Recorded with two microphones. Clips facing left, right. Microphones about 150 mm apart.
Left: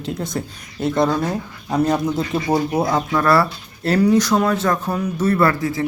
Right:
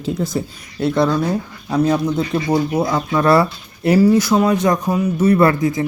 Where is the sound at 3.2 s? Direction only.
20° right (ahead or behind).